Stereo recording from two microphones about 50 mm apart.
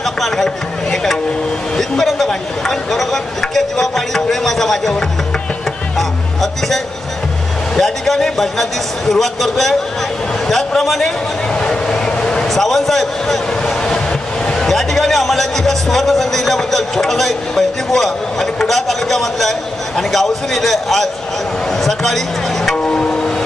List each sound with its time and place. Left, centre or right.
1.8 s a man's voice: centre
5.9 s music: centre
7.7 s a man's voice: centre
11.5 s a sound: centre
12.5 s a man's voice: centre
14.5 s a man's voice: centre
22.8 s music: centre